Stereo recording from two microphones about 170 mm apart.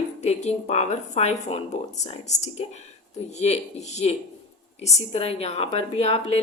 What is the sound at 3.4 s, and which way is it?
A woman's voice, 40° left (ahead or behind).